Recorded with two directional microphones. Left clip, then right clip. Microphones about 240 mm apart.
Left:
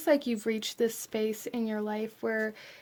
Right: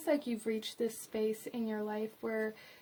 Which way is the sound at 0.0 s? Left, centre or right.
Left.